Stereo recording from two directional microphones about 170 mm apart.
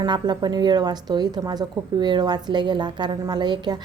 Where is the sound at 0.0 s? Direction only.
25° right (ahead or behind).